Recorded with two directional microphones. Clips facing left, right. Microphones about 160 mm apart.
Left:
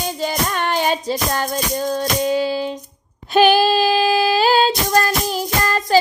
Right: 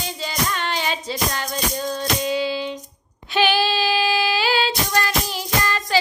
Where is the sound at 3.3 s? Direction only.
45° left (ahead or behind).